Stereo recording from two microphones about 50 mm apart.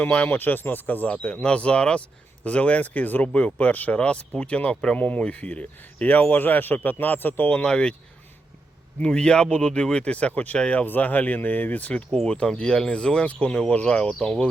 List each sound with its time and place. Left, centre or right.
0.0 s speech: left
0.3 s speech: left; by 4.9 s centre
4.9 s speech: left
7.6 s speech: centre
9.0 s speech: centre
10.8 s speech: left
12.2 s speech: centre